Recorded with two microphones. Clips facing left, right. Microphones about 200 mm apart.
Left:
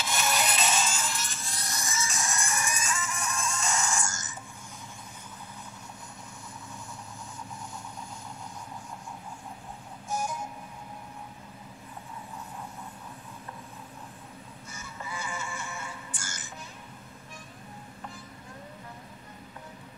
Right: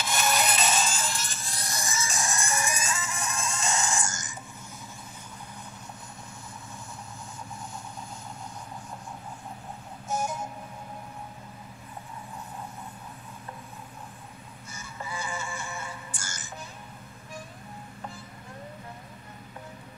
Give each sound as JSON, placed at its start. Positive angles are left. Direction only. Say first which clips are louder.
{"t": 0.0, "sound": "music", "louder": "right 2 dB", "side_deg": -45}
{"t": 10.0, "sound": "music", "louder": "right 2 dB", "side_deg": -20}
{"t": 14.8, "sound": "music", "louder": "right 2 dB", "side_deg": -30}